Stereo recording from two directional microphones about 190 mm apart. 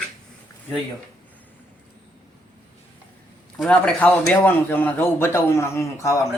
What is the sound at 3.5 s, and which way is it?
A man's voice, 5° left (ahead or behind).